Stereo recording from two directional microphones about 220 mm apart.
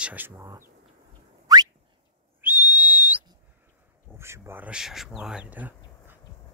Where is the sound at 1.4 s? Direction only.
15° right (ahead or behind).